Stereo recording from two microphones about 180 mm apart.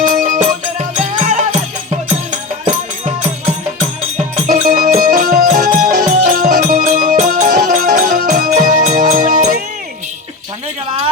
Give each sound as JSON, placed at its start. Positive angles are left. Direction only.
{"t": 0.1, "sound": "music", "side_deg": -45}
{"t": 4.4, "sound": "music", "side_deg": -45}